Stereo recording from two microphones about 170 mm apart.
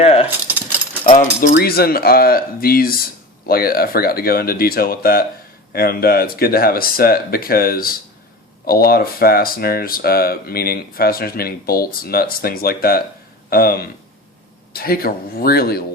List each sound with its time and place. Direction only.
0.0 s keys jangling: 35° left (ahead or behind)
1.1 s speech: 55° left (ahead or behind)